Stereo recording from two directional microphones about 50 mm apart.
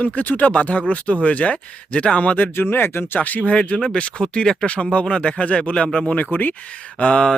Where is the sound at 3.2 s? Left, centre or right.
Left.